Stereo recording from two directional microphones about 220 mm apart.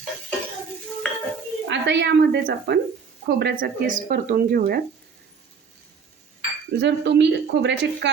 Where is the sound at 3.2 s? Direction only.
45° right (ahead or behind).